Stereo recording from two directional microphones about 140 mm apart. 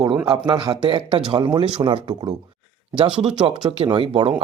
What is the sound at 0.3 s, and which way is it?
Speech, 35° right (ahead or behind).